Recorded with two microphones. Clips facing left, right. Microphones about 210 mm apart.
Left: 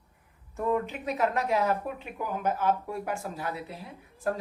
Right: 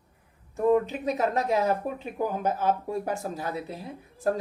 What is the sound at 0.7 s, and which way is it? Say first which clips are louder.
Speech: right 5 dB; 35° right (ahead or behind).